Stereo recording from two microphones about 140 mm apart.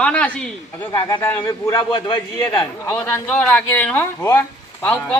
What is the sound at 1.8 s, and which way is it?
Speech, 35° left (ahead or behind).